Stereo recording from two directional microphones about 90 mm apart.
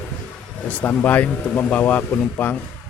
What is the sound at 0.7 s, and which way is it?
Speech, 15° left (ahead or behind).